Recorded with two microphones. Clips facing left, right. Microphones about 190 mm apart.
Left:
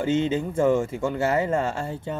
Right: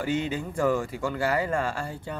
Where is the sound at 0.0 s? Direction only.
25° left (ahead or behind).